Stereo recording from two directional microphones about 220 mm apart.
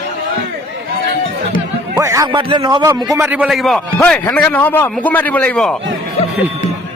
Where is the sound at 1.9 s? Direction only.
15° right (ahead or behind).